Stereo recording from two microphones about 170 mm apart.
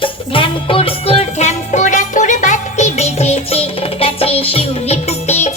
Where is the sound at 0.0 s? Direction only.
30° left (ahead or behind).